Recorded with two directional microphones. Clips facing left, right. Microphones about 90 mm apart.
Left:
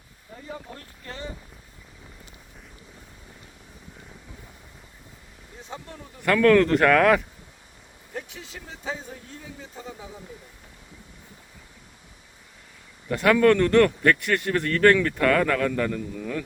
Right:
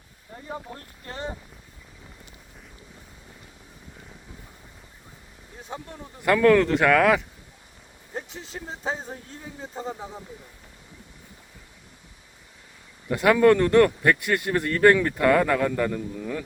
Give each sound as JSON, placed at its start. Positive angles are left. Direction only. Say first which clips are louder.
{"t": 0.3, "sound": "speech", "louder": "right 2 dB", "side_deg": -35}
{"t": 5.6, "sound": "a man's voice", "louder": "right 2 dB", "side_deg": -15}
{"t": 8.1, "sound": "speech", "louder": "right 2 dB", "side_deg": -35}
{"t": 13.1, "sound": "a man's voice", "louder": "right 1 dB", "side_deg": -15}